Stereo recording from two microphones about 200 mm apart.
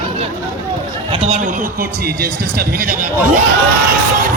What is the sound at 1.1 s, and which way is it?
A man's voice, 30° right (ahead or behind).